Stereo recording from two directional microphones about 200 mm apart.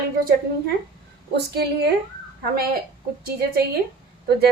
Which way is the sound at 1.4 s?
55° right (ahead or behind).